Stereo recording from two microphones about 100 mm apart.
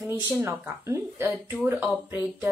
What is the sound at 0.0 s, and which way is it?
A woman's voice, 25° right (ahead or behind).